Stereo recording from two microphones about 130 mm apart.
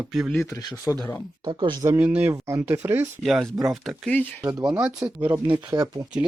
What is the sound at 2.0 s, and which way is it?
Speech, 10° right (ahead or behind).